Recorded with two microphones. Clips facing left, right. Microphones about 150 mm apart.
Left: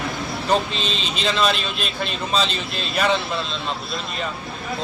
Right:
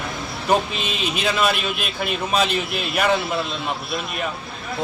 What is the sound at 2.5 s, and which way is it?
Speech, 60° right (ahead or behind).